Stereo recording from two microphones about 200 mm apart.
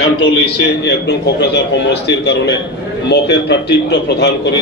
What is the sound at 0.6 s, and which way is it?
A man's voice, 55° left (ahead or behind).